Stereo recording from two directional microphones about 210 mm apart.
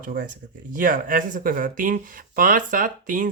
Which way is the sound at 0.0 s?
40° right (ahead or behind).